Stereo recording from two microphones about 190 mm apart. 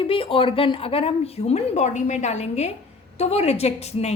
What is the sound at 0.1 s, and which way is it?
A woman's voice, 30° left (ahead or behind).